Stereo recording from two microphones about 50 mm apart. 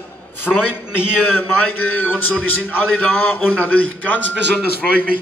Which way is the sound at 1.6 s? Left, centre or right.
Left.